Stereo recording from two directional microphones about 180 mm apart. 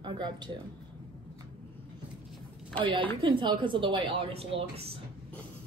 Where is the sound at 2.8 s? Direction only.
30° right (ahead or behind).